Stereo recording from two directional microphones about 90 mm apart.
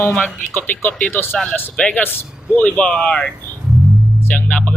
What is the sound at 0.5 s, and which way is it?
Speech, 20° left (ahead or behind).